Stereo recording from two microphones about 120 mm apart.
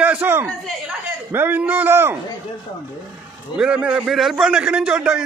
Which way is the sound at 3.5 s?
10° right (ahead or behind).